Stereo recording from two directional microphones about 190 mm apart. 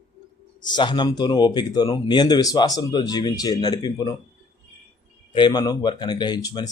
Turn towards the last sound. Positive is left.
turn(degrees=20)  # may be behind; listen again after turning